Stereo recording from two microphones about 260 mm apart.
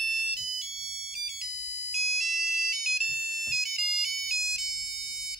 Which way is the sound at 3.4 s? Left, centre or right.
Centre.